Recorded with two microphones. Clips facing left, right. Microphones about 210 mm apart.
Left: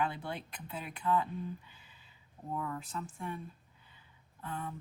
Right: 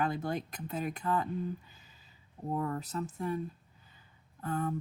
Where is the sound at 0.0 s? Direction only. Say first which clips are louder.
Right 4 dB; 40° right (ahead or behind).